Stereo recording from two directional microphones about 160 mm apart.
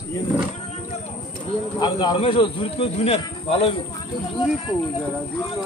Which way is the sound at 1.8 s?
25° left (ahead or behind).